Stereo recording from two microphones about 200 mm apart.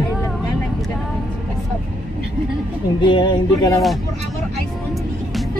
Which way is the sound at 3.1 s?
20° left (ahead or behind).